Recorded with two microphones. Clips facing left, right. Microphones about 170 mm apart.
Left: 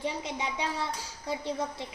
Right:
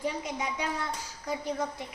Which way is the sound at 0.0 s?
25° left (ahead or behind).